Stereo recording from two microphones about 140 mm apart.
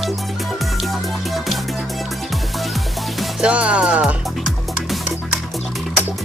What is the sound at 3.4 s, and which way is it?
Music, 10° right (ahead or behind).